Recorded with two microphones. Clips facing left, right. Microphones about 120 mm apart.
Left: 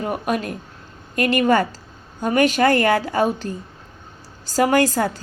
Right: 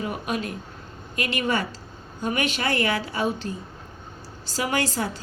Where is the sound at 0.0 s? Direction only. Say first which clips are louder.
Left 5 dB; 45° left (ahead or behind).